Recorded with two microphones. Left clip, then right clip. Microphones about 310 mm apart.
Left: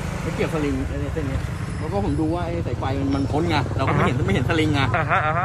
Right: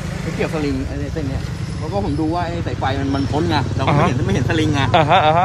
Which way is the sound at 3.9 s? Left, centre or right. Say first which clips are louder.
Right 6 dB; centre.